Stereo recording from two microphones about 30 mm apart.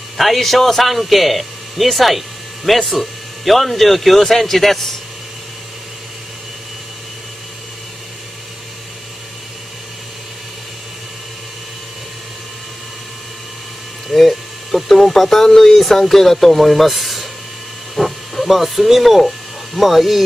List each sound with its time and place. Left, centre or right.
0.2 s a man's voice: centre
14.0 s speech: centre
15.7 s speech: centre